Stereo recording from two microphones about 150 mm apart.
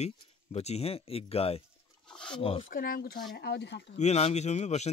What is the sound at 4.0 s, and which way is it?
Speech, 45° left (ahead or behind).